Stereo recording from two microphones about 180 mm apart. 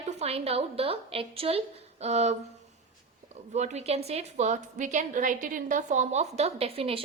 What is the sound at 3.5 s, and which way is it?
A woman's voice, 40° right (ahead or behind).